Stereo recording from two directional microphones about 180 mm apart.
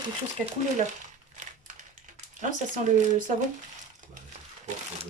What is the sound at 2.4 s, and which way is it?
Speech, 45° right (ahead or behind).